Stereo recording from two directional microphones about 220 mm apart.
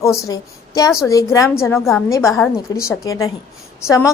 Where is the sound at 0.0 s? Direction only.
15° left (ahead or behind).